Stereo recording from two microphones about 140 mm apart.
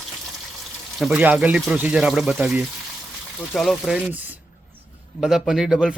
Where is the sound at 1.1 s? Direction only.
10° right (ahead or behind).